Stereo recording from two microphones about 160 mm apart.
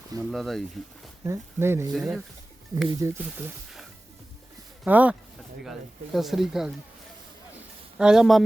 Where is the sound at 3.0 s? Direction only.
15° right (ahead or behind).